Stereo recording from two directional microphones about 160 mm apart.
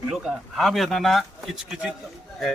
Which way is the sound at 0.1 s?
5° right (ahead or behind).